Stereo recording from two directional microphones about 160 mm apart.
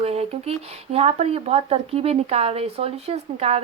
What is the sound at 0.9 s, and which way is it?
Speech, 40° right (ahead or behind).